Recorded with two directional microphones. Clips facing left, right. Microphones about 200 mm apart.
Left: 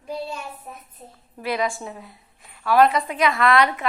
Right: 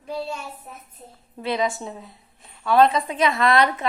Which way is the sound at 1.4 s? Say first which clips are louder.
Right 1 dB; 20° right (ahead or behind).